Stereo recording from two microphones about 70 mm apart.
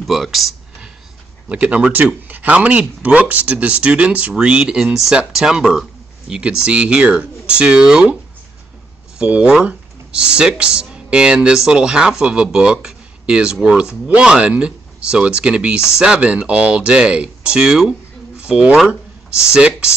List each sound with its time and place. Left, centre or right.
0.0 s speech: centre
1.5 s speech: centre
9.2 s speech: centre